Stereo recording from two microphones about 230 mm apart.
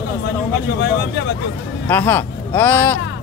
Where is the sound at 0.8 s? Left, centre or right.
Left.